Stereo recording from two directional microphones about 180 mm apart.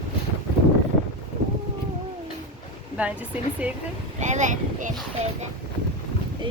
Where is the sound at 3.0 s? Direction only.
10° right (ahead or behind).